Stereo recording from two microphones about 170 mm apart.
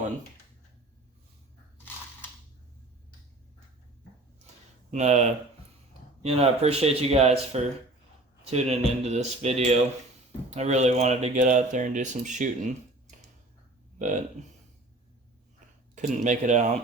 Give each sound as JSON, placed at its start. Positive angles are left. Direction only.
{"t": 4.9, "sound": "speech", "side_deg": -40}
{"t": 16.0, "sound": "speech", "side_deg": -45}